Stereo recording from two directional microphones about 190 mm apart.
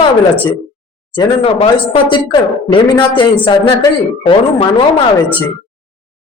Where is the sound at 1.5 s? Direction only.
30° left (ahead or behind).